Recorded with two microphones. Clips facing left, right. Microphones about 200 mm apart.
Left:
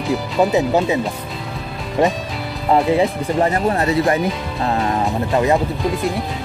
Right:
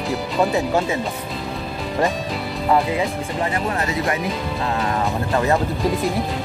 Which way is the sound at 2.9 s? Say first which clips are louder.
Left 6 dB; 35° left (ahead or behind).